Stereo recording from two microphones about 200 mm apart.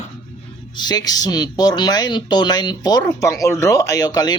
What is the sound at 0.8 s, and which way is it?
Speech, 20° left (ahead or behind).